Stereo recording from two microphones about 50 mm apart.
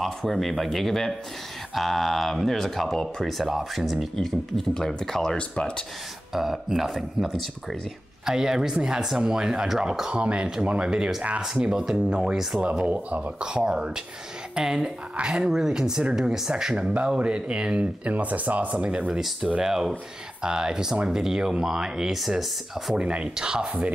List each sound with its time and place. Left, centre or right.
0.0 s speech: centre
3.3 s speech: centre
4.2 s speech: centre
6.3 s speech: centre
8.3 s a woman's voice: centre; by 18.9 s right
18.9 s speech: right
19.1 s speech: centre
22.2 s speech: centre
22.9 s speech: right